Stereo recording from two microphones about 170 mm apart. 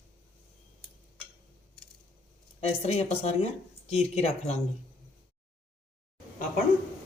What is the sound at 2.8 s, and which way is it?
Speech, 40° left (ahead or behind).